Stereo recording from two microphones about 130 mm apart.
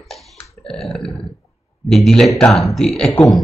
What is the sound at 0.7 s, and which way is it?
Burping, 5° left (ahead or behind).